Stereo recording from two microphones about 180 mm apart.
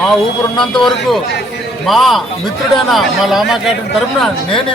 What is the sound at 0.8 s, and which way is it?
Speech, centre (ahead or behind).